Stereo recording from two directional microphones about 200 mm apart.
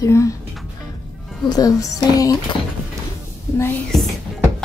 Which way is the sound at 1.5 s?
20° left (ahead or behind).